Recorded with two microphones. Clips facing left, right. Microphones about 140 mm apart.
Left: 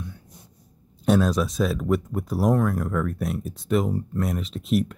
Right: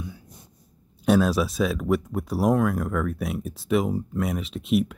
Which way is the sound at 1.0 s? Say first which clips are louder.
Even; centre (ahead or behind).